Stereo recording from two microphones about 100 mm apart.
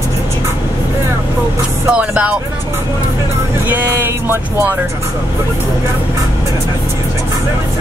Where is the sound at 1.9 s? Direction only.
10° right (ahead or behind).